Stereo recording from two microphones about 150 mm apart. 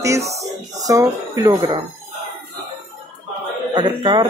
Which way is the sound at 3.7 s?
30° right (ahead or behind).